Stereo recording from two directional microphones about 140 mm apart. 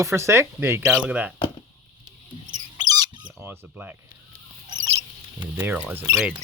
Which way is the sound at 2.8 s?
25° right (ahead or behind).